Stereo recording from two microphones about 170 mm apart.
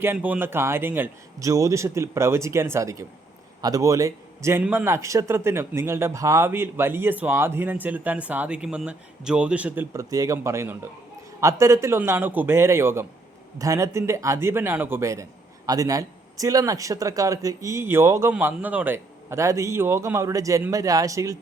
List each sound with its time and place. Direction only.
0.0 s a man's voice: 10° right (ahead or behind)